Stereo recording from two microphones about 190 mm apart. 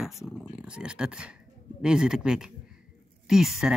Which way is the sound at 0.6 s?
5° right (ahead or behind).